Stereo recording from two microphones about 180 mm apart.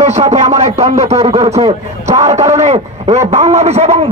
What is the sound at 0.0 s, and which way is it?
A man's voice, 40° right (ahead or behind).